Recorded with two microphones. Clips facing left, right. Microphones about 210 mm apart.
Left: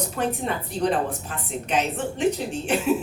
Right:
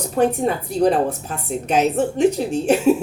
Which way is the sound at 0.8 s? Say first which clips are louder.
Right 7 dB; 40° right (ahead or behind).